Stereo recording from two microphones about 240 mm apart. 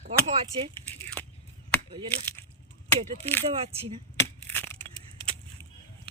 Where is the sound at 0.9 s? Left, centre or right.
Centre.